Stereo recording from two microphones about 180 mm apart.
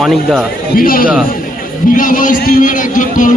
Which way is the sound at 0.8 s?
50° left (ahead or behind).